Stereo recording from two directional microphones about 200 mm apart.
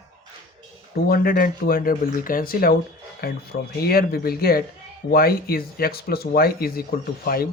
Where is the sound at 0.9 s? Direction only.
50° left (ahead or behind).